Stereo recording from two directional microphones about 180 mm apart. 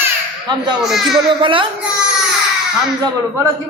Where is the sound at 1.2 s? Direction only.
30° right (ahead or behind).